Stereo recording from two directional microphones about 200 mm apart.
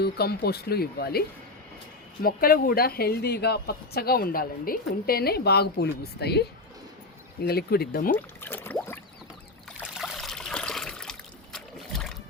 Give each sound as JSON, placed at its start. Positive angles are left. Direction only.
{"t": 0.0, "sound": "a woman's voice", "side_deg": 50}
{"t": 2.2, "sound": "a woman's voice", "side_deg": 50}
{"t": 8.1, "sound": "rowboat", "side_deg": 10}
{"t": 9.9, "sound": "trickle", "side_deg": 0}